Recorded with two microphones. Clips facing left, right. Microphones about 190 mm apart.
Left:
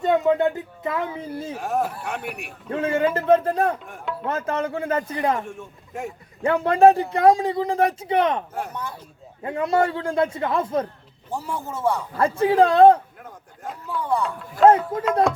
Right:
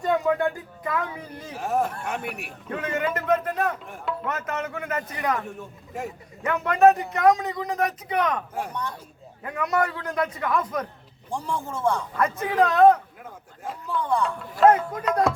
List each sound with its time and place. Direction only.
0.0 s speech: 25° left (ahead or behind)
1.5 s speech: centre (ahead or behind)
2.6 s speech: 30° left (ahead or behind)
3.8 s speech: centre (ahead or behind)
4.3 s speech: 30° left (ahead or behind)
5.5 s speech: 5° right (ahead or behind)
6.4 s speech: 30° left (ahead or behind)
8.5 s speech: 5° left (ahead or behind)
9.4 s speech: 25° left (ahead or behind)
11.3 s speech: 5° left (ahead or behind)
12.1 s speech: 30° left (ahead or behind)
13.7 s speech: 5° left (ahead or behind)
14.9 s speech: 25° left (ahead or behind)